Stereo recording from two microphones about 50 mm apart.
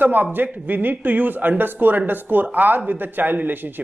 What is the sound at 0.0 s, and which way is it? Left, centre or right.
Speech, right.